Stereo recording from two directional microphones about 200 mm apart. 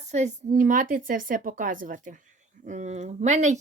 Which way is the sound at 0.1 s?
35° right (ahead or behind).